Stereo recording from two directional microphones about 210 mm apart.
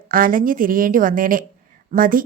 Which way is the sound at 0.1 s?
40° right (ahead or behind).